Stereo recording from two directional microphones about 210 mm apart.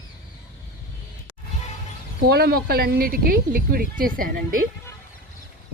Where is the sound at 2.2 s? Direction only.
50° right (ahead or behind).